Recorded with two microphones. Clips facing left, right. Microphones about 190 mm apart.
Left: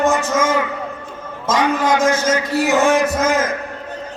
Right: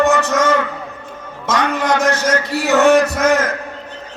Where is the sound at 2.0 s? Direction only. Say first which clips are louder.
Even; 70° right (ahead or behind).